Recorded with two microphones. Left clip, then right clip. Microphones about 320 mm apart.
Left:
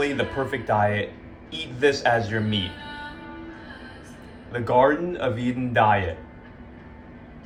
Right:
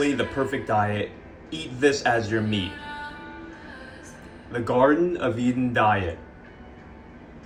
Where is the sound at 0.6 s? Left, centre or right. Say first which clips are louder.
Left 4 dB; left.